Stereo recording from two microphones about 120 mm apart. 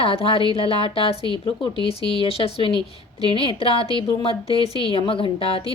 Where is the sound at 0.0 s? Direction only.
50° left (ahead or behind).